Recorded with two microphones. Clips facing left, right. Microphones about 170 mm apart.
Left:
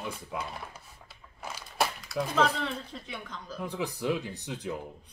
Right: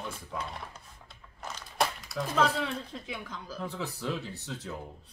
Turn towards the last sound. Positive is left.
turn(degrees=15)  # may be behind; listen again after turning